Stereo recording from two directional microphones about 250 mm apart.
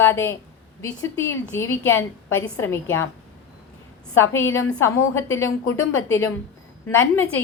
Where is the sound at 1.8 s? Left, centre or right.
Left.